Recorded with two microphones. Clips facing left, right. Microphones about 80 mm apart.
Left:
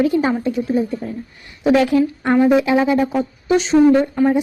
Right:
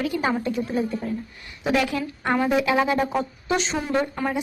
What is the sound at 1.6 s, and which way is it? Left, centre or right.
A woman's voice, left.